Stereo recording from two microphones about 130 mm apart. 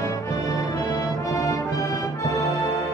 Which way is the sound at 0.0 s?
25° left (ahead or behind).